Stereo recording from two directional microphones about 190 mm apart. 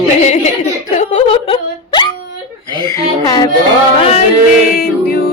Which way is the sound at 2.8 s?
20° left (ahead or behind).